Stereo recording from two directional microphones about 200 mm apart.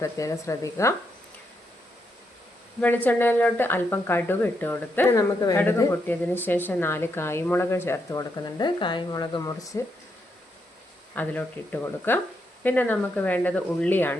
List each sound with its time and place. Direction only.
0.0 s speech: 15° left (ahead or behind)
2.8 s speech: 10° left (ahead or behind)
11.1 s speech: 10° left (ahead or behind)